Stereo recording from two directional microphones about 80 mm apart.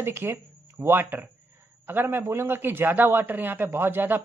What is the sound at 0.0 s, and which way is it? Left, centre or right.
A man's voice, right.